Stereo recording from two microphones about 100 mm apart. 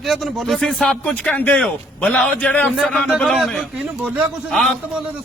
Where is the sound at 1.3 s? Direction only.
15° left (ahead or behind).